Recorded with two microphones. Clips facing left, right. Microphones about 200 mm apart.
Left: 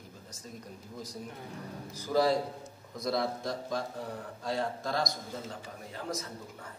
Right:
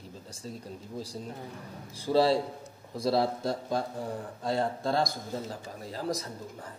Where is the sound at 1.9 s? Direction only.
30° right (ahead or behind).